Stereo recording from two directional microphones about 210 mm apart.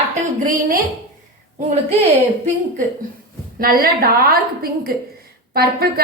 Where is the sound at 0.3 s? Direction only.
40° right (ahead or behind).